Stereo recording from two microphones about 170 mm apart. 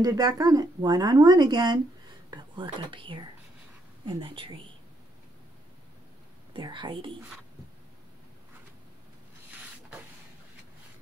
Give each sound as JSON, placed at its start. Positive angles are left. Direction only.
{"t": 0.0, "sound": "speech", "side_deg": -20}
{"t": 6.5, "sound": "speech", "side_deg": -30}